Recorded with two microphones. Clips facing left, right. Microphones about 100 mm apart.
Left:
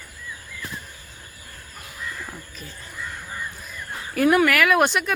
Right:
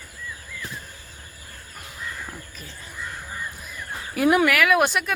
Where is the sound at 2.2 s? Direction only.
Centre (ahead or behind).